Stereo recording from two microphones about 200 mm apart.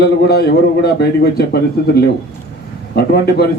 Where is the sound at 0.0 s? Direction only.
55° left (ahead or behind).